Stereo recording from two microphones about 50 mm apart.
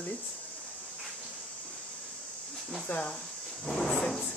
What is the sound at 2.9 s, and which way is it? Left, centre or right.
Speech, left.